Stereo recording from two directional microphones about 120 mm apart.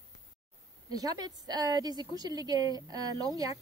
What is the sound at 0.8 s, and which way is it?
A woman's voice, 35° right (ahead or behind).